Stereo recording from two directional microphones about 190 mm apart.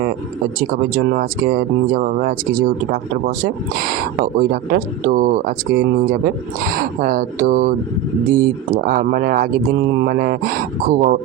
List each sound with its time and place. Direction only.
0.9 s speech: 50° right (ahead or behind)